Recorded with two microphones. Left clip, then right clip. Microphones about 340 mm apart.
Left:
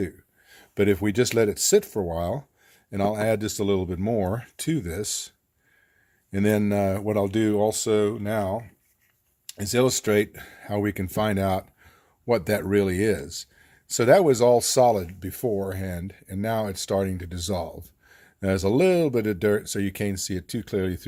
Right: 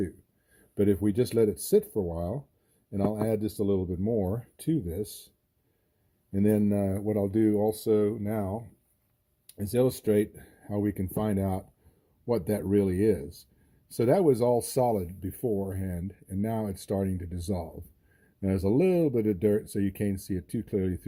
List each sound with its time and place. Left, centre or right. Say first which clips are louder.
0.7 s speech: left 4 dB; left
6.3 s speech: left 4 dB; left
9.5 s speech: left 4 dB; left